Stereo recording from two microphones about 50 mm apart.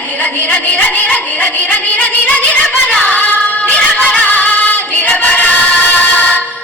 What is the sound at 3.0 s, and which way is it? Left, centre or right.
Music, left.